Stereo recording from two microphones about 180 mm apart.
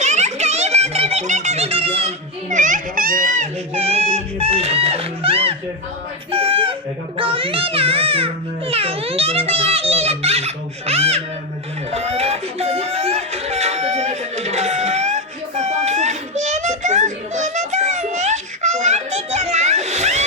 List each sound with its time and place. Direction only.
0.0 s a sound: 40° right (ahead or behind)
6.3 s chicken: 30° right (ahead or behind)
7.2 s a child's voice: 30° right (ahead or behind)
11.9 s music: 35° right (ahead or behind)